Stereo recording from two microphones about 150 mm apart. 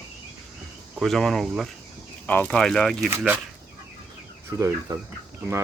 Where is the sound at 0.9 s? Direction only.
Centre (ahead or behind).